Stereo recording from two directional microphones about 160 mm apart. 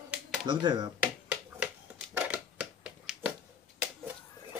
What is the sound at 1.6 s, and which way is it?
Finger snapping, 10° right (ahead or behind).